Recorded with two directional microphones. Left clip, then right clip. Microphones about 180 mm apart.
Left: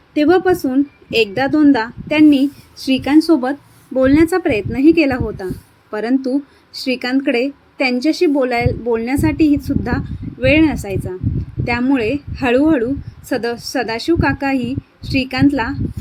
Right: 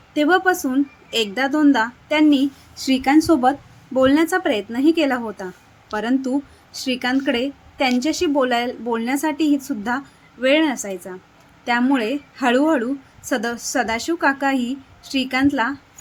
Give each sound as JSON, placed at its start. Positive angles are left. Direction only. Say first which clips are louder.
{"t": 0.1, "sound": "a woman's voice", "louder": "left 3 dB", "side_deg": 5}